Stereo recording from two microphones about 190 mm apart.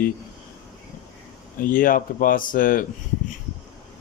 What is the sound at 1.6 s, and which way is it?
Speech, 45° left (ahead or behind).